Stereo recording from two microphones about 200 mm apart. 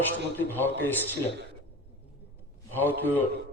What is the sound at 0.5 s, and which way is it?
Speech, 10° left (ahead or behind).